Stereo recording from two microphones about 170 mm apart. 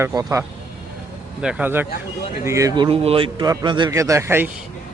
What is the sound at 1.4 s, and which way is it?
Speech, 10° right (ahead or behind).